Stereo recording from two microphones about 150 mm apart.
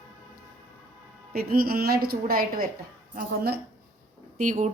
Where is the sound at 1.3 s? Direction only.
85° right.